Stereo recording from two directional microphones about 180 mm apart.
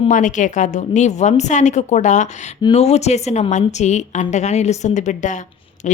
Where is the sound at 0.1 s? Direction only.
45° left (ahead or behind).